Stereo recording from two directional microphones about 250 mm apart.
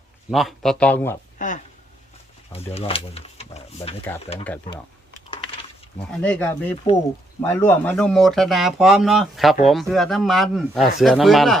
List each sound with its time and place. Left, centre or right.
0.3 s speech: centre
1.4 s speech: left
2.7 s speech: left
6.0 s speech: centre